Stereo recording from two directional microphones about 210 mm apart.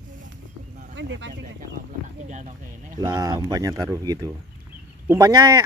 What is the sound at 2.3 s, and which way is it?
Speech, 35° right (ahead or behind).